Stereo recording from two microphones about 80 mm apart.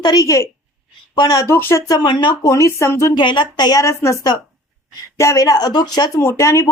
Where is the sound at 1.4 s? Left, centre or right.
Left.